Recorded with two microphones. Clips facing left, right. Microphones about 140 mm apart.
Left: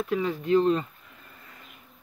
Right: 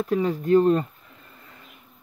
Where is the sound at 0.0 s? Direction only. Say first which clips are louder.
Right 4 dB; 35° right (ahead or behind).